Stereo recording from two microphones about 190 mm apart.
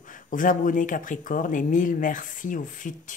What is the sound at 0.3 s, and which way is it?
Speech, 45° left (ahead or behind).